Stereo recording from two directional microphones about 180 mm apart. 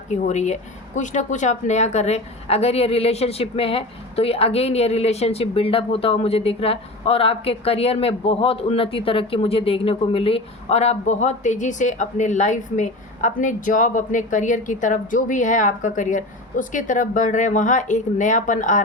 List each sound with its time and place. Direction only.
0.1 s speech: 40° left (ahead or behind)